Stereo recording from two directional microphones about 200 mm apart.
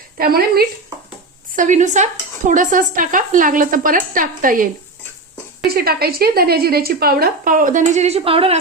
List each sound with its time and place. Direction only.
0.2 s speech: 50° right (ahead or behind)
1.5 s speech: 40° right (ahead or behind)